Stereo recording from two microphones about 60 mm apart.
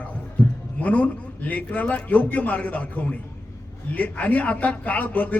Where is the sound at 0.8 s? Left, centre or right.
Left.